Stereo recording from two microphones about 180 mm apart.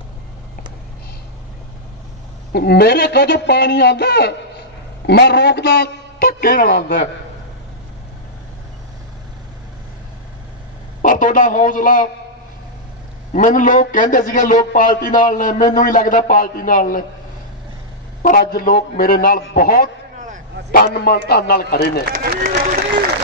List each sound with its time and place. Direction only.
2.5 s a man's voice: 65° left (ahead or behind)
11.0 s a man's voice: 45° left (ahead or behind)
13.3 s a man's voice: 45° left (ahead or behind)
18.2 s a man's voice: 55° left (ahead or behind)
22.3 s a sound: 55° right (ahead or behind)